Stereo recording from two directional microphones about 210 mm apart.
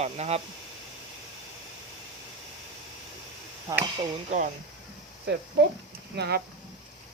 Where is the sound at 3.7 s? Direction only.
15° right (ahead or behind).